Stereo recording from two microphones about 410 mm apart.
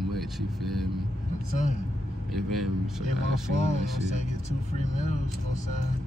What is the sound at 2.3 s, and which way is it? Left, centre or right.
Speech, centre.